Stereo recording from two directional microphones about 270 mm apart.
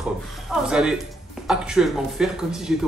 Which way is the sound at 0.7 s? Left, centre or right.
Centre.